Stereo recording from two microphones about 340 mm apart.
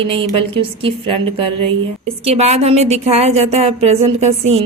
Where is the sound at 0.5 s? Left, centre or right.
Centre.